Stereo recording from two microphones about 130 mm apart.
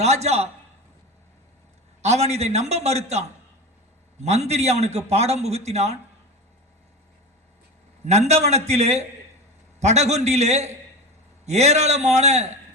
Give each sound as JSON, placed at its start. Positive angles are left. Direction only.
{"t": 0.0, "sound": "a man's voice", "side_deg": -55}
{"t": 2.0, "sound": "a man's voice", "side_deg": -55}
{"t": 8.0, "sound": "a man's voice", "side_deg": -55}